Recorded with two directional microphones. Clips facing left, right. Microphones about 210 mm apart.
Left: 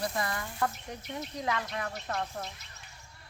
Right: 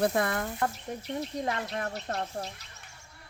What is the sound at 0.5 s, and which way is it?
Speech, 30° right (ahead or behind).